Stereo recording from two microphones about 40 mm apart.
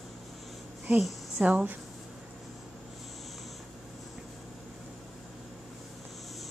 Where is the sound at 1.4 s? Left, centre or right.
Right.